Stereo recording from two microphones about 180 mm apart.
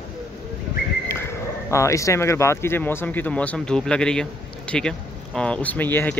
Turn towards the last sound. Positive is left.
turn(degrees=10)  # may be behind; listen again after turning